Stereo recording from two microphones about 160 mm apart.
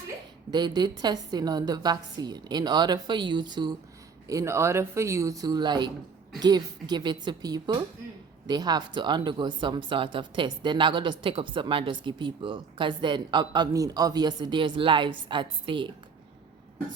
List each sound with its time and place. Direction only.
0.5 s speech: 25° right (ahead or behind)